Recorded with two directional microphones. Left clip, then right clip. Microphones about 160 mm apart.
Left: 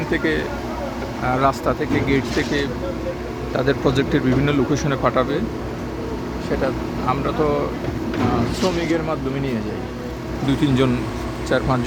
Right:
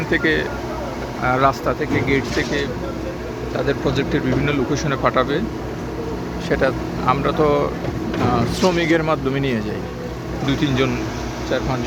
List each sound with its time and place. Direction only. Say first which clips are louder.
0.1 s speech: right 3 dB; 10° left (ahead or behind)
1.5 s speech: right 1 dB; 20° left (ahead or behind)
3.7 s speech: left 2 dB; 40° left (ahead or behind)
5.0 s speech: right 1 dB; 15° left (ahead or behind)
6.5 s speech: right 4 dB; 5° right (ahead or behind)
8.6 s speech: right 6 dB; 10° right (ahead or behind)
10.4 s speech: left 1 dB; 20° left (ahead or behind)